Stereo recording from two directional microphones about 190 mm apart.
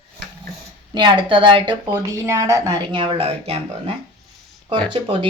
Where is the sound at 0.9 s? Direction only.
25° right (ahead or behind).